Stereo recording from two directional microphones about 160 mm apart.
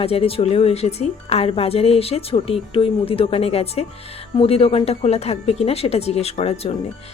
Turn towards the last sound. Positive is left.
turn(degrees=40)  # may be behind; listen again after turning